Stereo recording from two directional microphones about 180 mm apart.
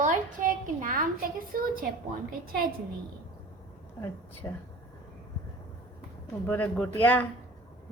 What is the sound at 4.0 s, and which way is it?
Speech, 15° left (ahead or behind).